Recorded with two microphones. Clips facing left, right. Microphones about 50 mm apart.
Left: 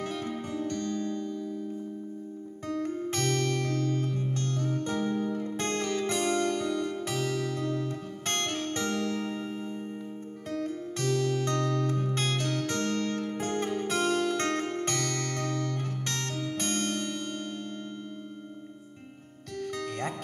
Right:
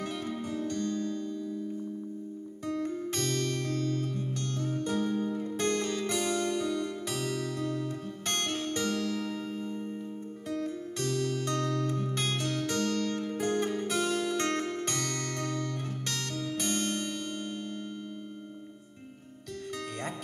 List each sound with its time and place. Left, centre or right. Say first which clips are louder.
0.0 s music: left 1 dB; left
2.7 s music: left 2 dB; left
19.7 s music: left 3 dB; left